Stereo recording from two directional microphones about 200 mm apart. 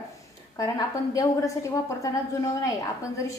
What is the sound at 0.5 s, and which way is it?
A woman's voice, 20° left (ahead or behind).